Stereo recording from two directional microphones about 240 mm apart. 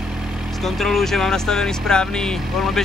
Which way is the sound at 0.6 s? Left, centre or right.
Centre.